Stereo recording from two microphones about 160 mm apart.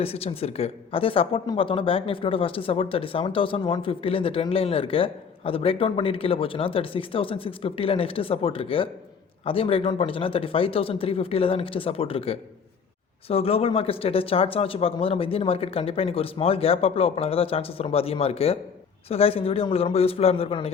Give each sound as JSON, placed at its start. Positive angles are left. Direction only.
{"t": 0.0, "sound": "speech", "side_deg": 40}